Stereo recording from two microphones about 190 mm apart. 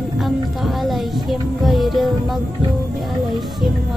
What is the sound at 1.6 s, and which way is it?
Music, centre (ahead or behind).